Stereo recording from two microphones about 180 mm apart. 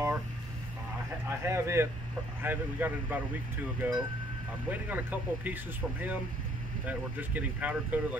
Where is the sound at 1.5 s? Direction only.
15° right (ahead or behind).